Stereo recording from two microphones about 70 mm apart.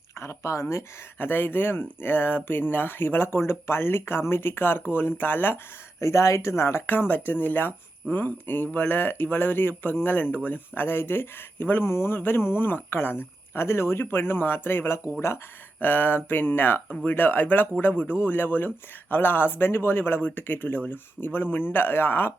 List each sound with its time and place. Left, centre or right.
0.2 s speech: left
1.3 s speech: left
6.0 s speech: left